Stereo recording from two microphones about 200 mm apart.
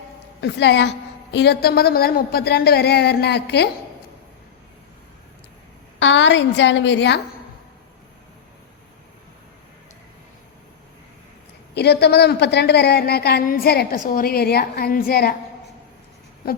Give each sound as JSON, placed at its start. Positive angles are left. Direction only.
{"t": 0.4, "sound": "a woman's voice", "side_deg": 60}
{"t": 6.0, "sound": "a woman's voice", "side_deg": 65}
{"t": 11.7, "sound": "a woman's voice", "side_deg": 55}
{"t": 16.4, "sound": "a sound", "side_deg": 50}